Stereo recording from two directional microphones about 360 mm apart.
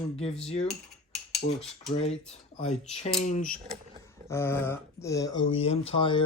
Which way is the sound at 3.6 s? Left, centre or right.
Centre.